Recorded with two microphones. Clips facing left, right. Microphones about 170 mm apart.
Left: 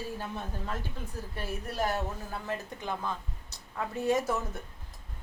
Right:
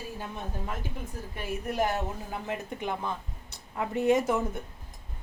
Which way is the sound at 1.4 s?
15° right (ahead or behind).